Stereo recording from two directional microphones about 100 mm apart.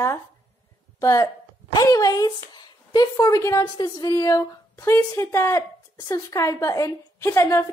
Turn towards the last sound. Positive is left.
turn(degrees=30)  # may be behind; listen again after turning